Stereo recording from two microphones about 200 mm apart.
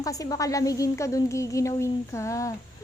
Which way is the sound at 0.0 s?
15° left (ahead or behind).